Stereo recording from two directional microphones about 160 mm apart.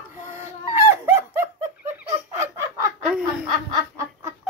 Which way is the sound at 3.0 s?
5° right (ahead or behind).